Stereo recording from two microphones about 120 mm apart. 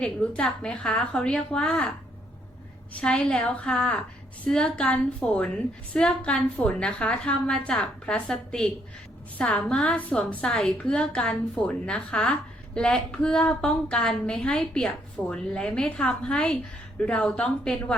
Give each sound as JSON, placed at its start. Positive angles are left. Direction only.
{"t": 0.0, "sound": "a woman's voice", "side_deg": 5}
{"t": 3.0, "sound": "a woman's voice", "side_deg": 5}